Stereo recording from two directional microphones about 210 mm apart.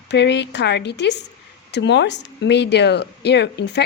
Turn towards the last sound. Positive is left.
turn(degrees=55)  # may be behind; listen again after turning